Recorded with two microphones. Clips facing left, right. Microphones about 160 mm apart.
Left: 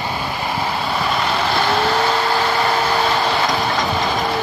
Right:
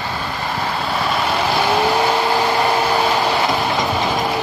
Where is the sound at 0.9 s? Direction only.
Centre (ahead or behind).